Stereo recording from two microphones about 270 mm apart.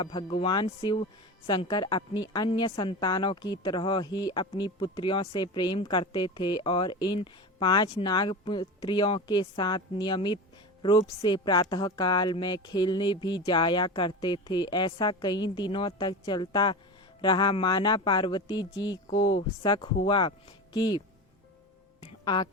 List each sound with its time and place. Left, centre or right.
0.0 s a woman's voice: centre
22.0 s music: centre